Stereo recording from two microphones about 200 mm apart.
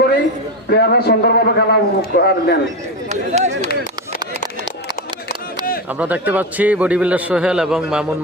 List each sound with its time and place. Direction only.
0.7 s a man's voice: 55° left (ahead or behind)
3.1 s speech: 35° right (ahead or behind)
5.3 s a sound: 45° left (ahead or behind)
6.0 s a man's voice: 10° right (ahead or behind)